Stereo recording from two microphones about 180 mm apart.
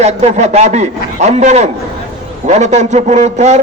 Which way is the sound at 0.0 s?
40° right (ahead or behind).